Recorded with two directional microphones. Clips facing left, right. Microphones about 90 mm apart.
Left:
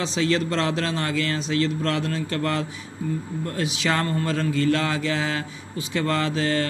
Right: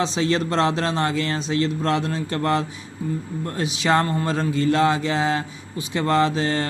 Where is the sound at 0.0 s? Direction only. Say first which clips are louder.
Right 2 dB; 25° right (ahead or behind).